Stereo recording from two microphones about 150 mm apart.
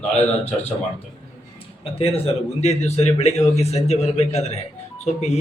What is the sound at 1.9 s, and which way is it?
Speech, 40° left (ahead or behind).